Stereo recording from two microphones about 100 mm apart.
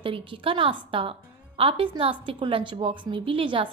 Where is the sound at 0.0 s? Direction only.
60° right (ahead or behind).